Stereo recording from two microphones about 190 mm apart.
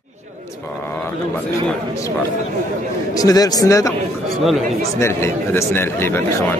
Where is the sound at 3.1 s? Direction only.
20° left (ahead or behind).